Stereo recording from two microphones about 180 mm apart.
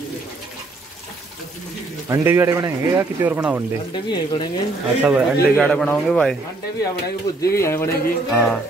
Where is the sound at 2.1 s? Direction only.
15° right (ahead or behind).